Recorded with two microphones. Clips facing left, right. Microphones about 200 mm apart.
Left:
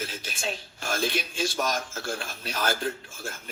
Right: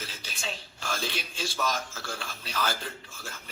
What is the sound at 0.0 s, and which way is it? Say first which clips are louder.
A man's voice: left 6 dB; 50° left (ahead or behind).